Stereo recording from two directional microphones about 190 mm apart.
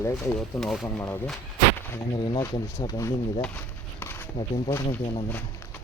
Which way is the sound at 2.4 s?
15° left (ahead or behind).